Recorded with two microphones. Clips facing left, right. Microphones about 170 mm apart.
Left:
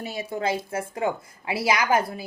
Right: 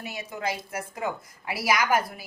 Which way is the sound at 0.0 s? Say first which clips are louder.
Left 5 dB; 30° left (ahead or behind).